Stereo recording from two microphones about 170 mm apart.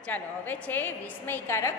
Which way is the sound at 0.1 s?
10° left (ahead or behind).